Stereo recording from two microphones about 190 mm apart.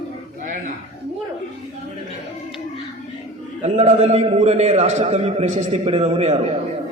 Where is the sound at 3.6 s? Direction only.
35° right (ahead or behind).